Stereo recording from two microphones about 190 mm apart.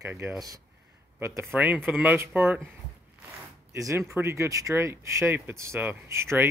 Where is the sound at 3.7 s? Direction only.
15° right (ahead or behind).